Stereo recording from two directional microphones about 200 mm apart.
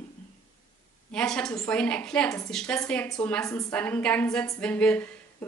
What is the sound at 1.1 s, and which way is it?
A woman's voice, 5° left (ahead or behind).